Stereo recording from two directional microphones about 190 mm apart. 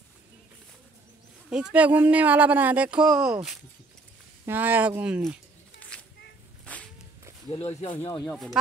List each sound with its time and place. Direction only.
1.5 s speech: 5° right (ahead or behind)
4.5 s speech: 10° right (ahead or behind)
5.9 s a sound: 5° left (ahead or behind)
7.5 s speech: 30° left (ahead or behind)